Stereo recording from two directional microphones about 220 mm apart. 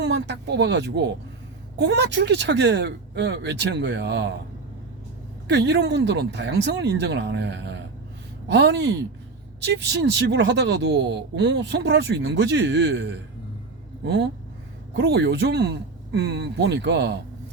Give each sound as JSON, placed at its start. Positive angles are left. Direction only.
{"t": 0.0, "sound": "speech", "side_deg": -50}
{"t": 5.5, "sound": "speech", "side_deg": -50}